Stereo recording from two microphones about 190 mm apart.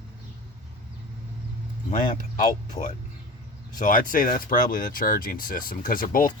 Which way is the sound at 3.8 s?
45° left (ahead or behind).